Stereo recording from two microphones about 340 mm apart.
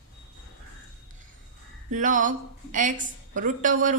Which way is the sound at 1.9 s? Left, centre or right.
Right.